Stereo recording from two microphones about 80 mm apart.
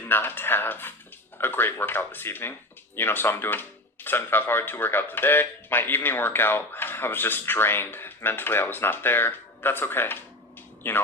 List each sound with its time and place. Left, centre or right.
0.1 s speech: left